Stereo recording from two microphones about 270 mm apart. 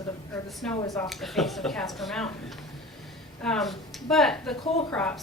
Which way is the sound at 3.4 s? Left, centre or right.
Centre.